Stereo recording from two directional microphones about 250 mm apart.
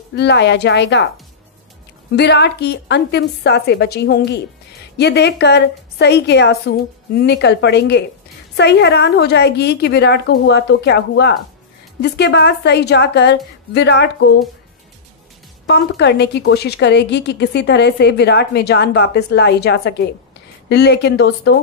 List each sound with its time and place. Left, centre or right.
0.1 s a woman's voice: left
2.1 s a woman's voice: left
15.6 s speech: left